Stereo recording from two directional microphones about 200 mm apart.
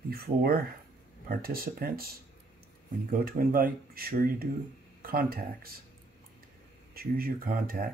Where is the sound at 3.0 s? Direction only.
45° right (ahead or behind).